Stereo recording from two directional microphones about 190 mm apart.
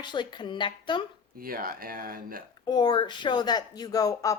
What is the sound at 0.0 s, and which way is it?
A woman's voice, 25° left (ahead or behind).